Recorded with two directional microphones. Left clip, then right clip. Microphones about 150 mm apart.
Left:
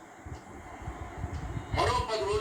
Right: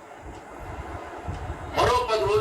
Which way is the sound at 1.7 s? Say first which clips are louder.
Right 7 dB; 35° right (ahead or behind).